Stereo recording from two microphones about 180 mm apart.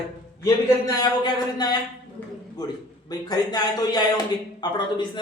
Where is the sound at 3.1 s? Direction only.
20° left (ahead or behind).